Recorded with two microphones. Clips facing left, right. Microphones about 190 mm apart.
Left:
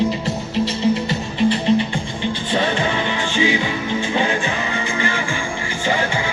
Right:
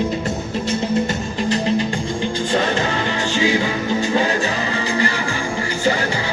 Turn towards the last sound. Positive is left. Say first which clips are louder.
# right 2 dB
turn(degrees=-40)  # may be behind; listen again after turning